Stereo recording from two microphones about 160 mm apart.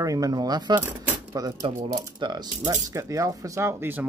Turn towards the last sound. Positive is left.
turn(degrees=-10)  # may be behind; listen again after turning